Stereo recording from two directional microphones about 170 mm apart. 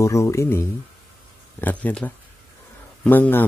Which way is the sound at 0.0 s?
15° left (ahead or behind).